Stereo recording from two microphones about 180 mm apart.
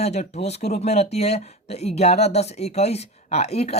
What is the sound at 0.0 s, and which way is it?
Speech, 35° left (ahead or behind).